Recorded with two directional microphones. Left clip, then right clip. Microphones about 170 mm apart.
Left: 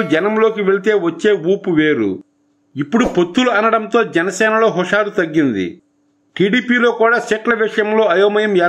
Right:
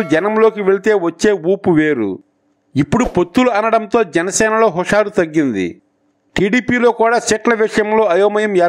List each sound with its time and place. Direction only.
0.2 s a man's voice: 40° right (ahead or behind)